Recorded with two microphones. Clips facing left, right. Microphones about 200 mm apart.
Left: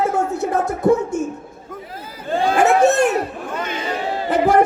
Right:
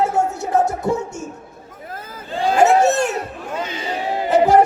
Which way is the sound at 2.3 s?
55° left (ahead or behind).